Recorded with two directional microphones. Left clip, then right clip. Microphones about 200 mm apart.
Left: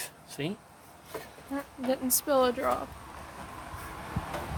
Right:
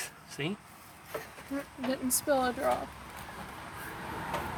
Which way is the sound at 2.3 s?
25° left (ahead or behind).